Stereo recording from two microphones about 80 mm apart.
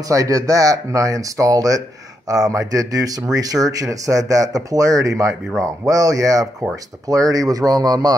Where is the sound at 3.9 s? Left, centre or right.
Right.